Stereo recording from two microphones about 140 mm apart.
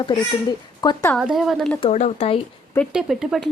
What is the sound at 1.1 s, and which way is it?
Speech, centre (ahead or behind).